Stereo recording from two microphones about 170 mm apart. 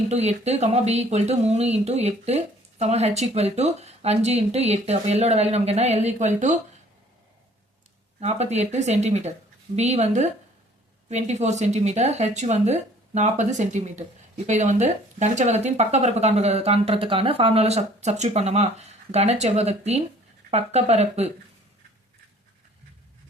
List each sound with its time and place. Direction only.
0.1 s speech: 40° right (ahead or behind)
8.2 s speech: 40° right (ahead or behind)